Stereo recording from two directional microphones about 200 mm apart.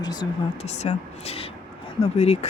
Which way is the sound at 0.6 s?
35° left (ahead or behind).